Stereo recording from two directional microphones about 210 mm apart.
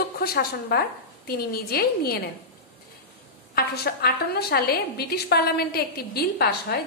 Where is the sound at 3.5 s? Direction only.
50° left (ahead or behind).